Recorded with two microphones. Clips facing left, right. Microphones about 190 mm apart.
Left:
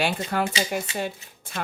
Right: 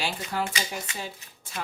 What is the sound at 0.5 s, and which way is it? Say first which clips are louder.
Speech: left 7 dB; 25° left (ahead or behind).